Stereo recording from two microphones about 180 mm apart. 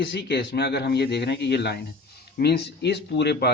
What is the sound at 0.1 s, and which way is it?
A man's voice, 70° left (ahead or behind).